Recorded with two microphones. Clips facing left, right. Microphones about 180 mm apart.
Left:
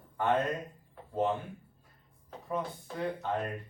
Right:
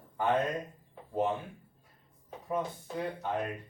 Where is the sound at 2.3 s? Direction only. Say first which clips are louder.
Right 1 dB; 10° right (ahead or behind).